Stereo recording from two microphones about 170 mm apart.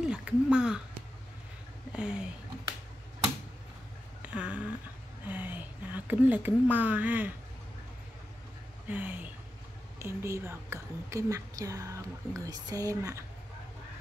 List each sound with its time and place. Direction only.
0.0 s speech: 5° right (ahead or behind)
1.9 s speech: 5° right (ahead or behind)
4.2 s a sound: 10° right (ahead or behind)
5.2 s speech: 10° right (ahead or behind)
8.8 s a woman's voice: 10° right (ahead or behind)